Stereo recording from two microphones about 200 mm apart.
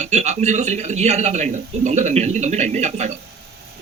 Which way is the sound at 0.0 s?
35° right (ahead or behind).